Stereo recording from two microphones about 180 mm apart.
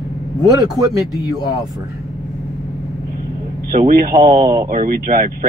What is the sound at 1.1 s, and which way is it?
Speech, 20° left (ahead or behind).